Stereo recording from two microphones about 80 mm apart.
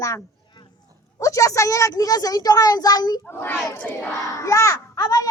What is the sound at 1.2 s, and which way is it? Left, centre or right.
A woman's voice, left.